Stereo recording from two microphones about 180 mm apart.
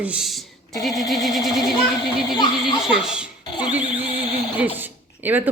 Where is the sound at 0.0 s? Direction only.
5° right (ahead or behind).